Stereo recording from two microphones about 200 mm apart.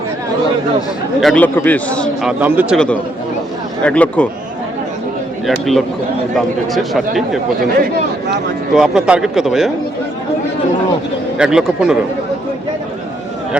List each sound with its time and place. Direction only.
1.2 s a man's voice: centre (ahead or behind)
2.4 s speech: 10° right (ahead or behind)
2.7 s a man's voice: 5° left (ahead or behind)
5.5 s speech: centre (ahead or behind)
8.7 s speech: 5° right (ahead or behind)
11.3 s speech: 5° right (ahead or behind)